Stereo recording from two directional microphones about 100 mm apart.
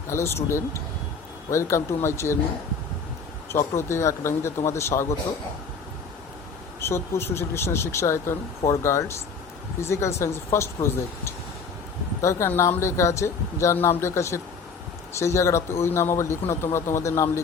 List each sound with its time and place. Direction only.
0.1 s speech: 25° left (ahead or behind)
3.5 s speech: 25° left (ahead or behind)
6.7 s speech: 25° left (ahead or behind)
12.2 s speech: 30° left (ahead or behind)